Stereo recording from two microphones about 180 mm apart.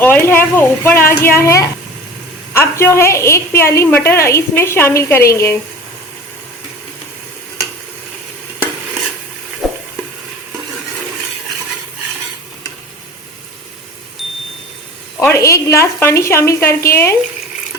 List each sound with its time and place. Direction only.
0.0 s a woman's voice: 10° left (ahead or behind)
9.6 s stir: centre (ahead or behind)
15.2 s a woman's voice: 15° left (ahead or behind)